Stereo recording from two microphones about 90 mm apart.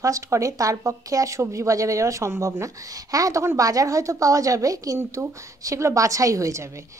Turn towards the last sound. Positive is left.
turn(degrees=-35)  # may be behind; listen again after turning